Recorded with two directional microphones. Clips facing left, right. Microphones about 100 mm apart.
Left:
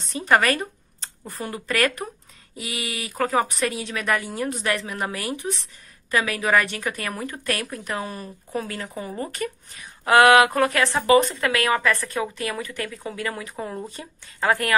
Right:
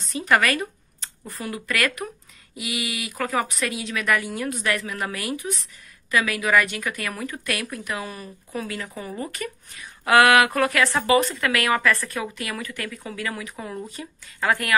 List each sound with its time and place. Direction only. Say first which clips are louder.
0.0 s a woman's voice: left 1 dB; 35° left (ahead or behind)